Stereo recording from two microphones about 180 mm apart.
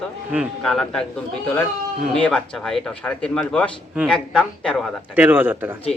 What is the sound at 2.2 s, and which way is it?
Speech, 5° left (ahead or behind).